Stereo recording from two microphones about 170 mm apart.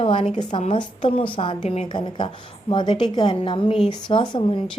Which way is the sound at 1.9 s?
25° left (ahead or behind).